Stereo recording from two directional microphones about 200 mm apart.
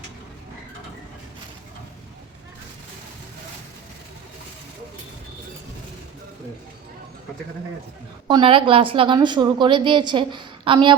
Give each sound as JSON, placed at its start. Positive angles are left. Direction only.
{"t": 8.3, "sound": "a woman's voice", "side_deg": -25}